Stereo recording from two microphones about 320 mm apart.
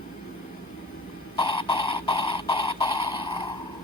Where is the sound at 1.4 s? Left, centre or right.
Centre.